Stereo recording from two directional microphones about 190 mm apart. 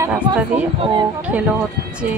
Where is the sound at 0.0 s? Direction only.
10° right (ahead or behind).